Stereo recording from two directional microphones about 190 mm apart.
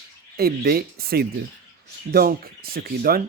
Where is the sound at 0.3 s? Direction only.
55° right (ahead or behind).